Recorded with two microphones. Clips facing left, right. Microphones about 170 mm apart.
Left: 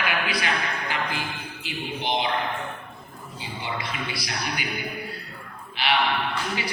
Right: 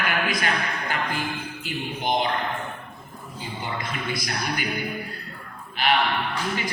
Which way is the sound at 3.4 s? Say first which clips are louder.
Right 1 dB; 45° right (ahead or behind).